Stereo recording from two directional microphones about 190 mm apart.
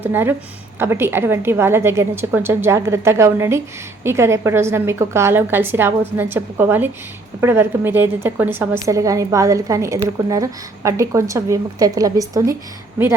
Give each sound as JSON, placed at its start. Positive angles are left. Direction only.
{"t": 0.0, "sound": "a woman's voice", "side_deg": -10}